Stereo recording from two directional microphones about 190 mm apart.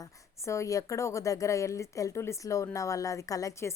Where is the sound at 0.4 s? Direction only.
15° left (ahead or behind).